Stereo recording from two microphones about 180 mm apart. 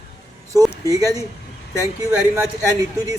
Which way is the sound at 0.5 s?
20° right (ahead or behind).